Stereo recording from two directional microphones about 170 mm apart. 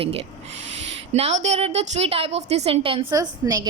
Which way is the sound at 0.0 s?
35° right (ahead or behind).